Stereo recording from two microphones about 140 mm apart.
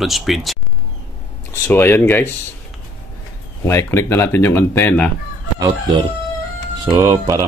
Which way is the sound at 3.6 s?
20° left (ahead or behind).